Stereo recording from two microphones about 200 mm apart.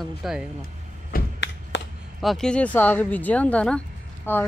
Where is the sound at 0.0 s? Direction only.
Centre (ahead or behind).